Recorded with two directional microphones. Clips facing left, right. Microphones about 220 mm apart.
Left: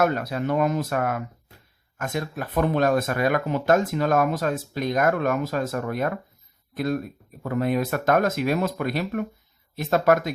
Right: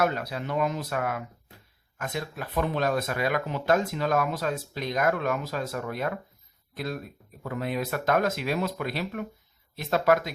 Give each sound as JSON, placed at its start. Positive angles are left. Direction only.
{"t": 0.0, "sound": "speech", "side_deg": 50}